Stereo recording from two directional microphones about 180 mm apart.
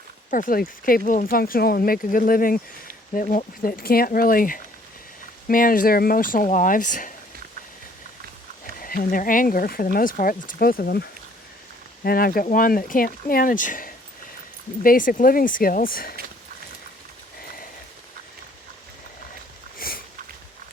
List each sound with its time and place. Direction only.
0.3 s speech: 50° left (ahead or behind)
8.8 s speech: 50° left (ahead or behind)
19.8 s sniff: 55° left (ahead or behind)